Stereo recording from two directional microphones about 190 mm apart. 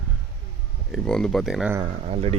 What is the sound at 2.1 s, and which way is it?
Speech, 30° right (ahead or behind).